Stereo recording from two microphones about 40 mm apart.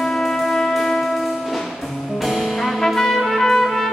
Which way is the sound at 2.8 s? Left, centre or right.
Centre.